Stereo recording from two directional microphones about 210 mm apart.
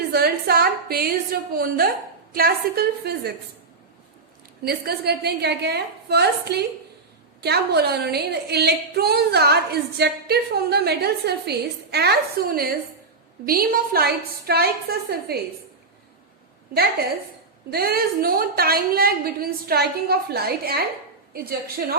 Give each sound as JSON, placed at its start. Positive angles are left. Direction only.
{"t": 0.1, "sound": "a woman's voice", "side_deg": -45}
{"t": 4.6, "sound": "a woman's voice", "side_deg": -50}
{"t": 17.7, "sound": "a woman's voice", "side_deg": -45}